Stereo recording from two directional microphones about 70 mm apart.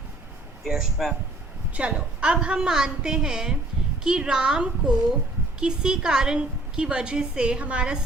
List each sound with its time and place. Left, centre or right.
0.6 s speech: centre
1.7 s a woman's voice: centre